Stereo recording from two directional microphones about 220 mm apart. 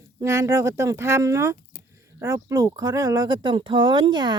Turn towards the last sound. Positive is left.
turn(degrees=-20)  # may be behind; listen again after turning